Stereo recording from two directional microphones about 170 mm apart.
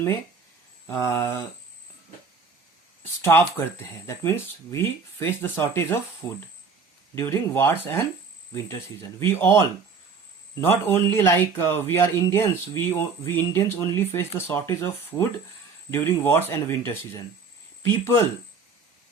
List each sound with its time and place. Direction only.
0.9 s speech: 15° left (ahead or behind)
3.2 s speech: 15° left (ahead or behind)